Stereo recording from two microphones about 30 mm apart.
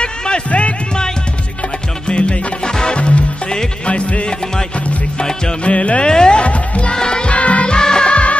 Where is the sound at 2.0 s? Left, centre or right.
Left.